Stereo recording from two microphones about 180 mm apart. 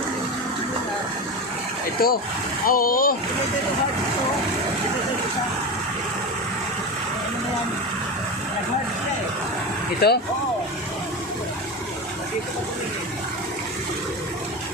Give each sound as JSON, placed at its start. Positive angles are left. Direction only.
{"t": 2.0, "sound": "speech", "side_deg": 55}
{"t": 10.0, "sound": "speech", "side_deg": 65}